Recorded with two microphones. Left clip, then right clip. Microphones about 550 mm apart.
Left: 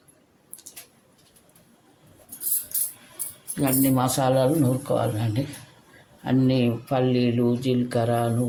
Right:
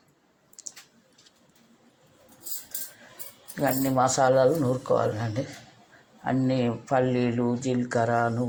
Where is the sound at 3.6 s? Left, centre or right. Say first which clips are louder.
Even; left.